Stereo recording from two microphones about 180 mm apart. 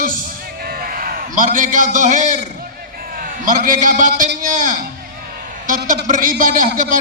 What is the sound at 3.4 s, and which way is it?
A man's voice, 50° right (ahead or behind).